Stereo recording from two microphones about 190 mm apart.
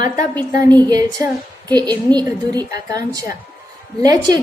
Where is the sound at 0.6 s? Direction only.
20° right (ahead or behind).